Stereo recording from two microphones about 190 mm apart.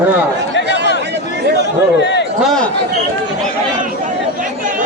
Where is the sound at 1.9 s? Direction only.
65° left (ahead or behind).